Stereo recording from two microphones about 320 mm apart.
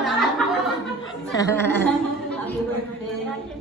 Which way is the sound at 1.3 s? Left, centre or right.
Centre.